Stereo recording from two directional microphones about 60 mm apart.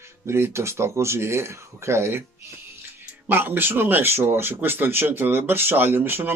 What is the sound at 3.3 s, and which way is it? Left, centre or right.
Speech, right.